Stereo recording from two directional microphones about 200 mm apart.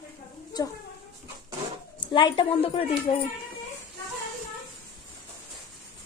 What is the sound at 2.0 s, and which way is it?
A woman's voice, 25° left (ahead or behind).